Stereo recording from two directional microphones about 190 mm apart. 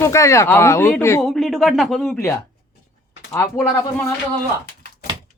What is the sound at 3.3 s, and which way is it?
Speech, 15° left (ahead or behind).